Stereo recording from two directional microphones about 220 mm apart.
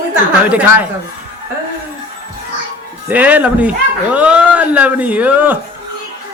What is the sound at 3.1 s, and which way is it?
Speech, 5° right (ahead or behind).